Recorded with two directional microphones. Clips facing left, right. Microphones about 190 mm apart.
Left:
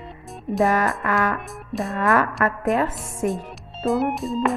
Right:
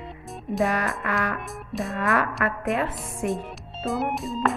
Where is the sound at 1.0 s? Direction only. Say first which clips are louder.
Left 5 dB; 45° left (ahead or behind).